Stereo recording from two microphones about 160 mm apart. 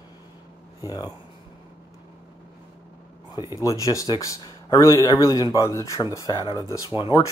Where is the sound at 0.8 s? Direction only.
25° left (ahead or behind).